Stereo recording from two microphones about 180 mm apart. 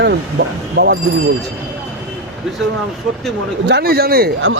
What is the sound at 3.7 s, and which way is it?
Speech, 60° right (ahead or behind).